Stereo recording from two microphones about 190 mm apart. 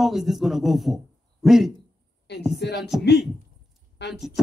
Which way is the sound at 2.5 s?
65° left (ahead or behind).